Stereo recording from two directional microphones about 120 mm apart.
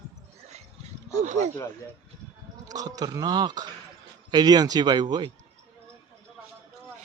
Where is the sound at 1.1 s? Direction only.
75° right (ahead or behind).